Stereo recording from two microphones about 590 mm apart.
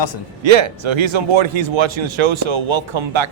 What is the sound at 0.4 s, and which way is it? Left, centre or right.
A man's voice, right.